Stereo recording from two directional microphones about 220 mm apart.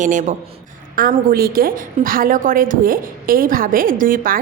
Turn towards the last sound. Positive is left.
turn(degrees=-40)  # may be behind; listen again after turning